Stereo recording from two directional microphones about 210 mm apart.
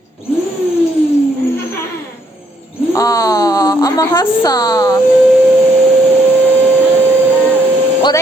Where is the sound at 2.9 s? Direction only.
15° left (ahead or behind).